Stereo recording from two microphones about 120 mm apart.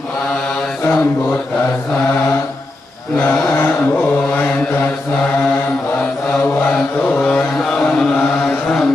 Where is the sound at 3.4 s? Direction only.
20° left (ahead or behind).